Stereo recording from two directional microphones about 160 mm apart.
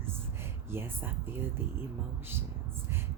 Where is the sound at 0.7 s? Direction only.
15° right (ahead or behind).